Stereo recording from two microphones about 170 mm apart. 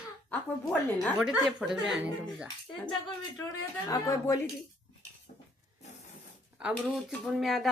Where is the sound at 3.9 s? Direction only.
20° left (ahead or behind).